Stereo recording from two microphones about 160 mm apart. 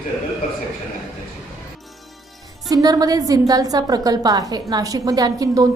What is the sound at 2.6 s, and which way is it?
A woman's voice, 25° right (ahead or behind).